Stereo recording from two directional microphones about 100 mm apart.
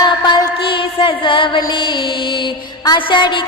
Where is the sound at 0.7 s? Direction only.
55° left (ahead or behind).